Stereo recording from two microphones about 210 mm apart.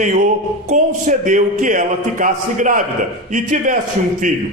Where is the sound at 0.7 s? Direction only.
35° right (ahead or behind).